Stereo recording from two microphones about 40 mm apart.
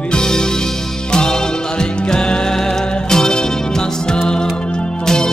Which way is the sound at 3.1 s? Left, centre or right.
Centre.